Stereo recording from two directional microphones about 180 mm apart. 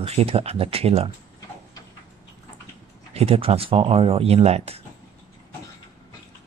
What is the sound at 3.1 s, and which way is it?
Speech, 30° right (ahead or behind).